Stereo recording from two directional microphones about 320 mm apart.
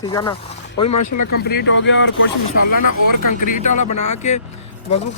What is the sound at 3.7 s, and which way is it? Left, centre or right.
Speech, left.